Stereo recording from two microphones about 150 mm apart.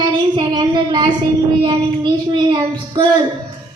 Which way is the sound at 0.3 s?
30° right (ahead or behind).